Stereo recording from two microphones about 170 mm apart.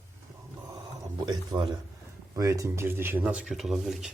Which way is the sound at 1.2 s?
25° right (ahead or behind).